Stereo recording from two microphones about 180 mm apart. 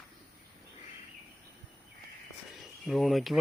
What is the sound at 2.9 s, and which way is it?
Speech, centre (ahead or behind).